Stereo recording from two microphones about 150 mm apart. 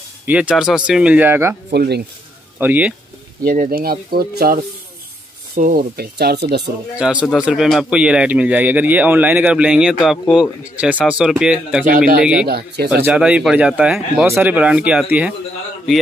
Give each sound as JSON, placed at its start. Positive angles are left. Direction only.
{"t": 0.3, "sound": "speech", "side_deg": -5}
{"t": 1.7, "sound": "speech", "side_deg": -90}
{"t": 2.6, "sound": "speech", "side_deg": -10}
{"t": 3.4, "sound": "speech", "side_deg": -70}
{"t": 5.6, "sound": "speech", "side_deg": -75}
{"t": 7.0, "sound": "speech", "side_deg": -5}
{"t": 12.4, "sound": "speech", "side_deg": -90}
{"t": 12.9, "sound": "speech", "side_deg": -10}